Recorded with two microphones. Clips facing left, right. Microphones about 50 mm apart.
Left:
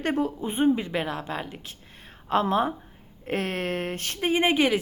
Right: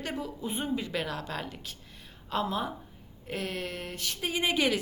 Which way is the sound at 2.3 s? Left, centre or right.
Left.